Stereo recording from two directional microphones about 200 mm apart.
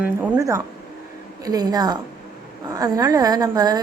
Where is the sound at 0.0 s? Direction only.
10° right (ahead or behind).